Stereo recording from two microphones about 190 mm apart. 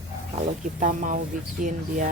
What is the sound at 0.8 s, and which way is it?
Speech, 40° right (ahead or behind).